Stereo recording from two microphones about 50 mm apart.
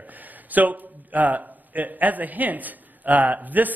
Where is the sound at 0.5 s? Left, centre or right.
Right.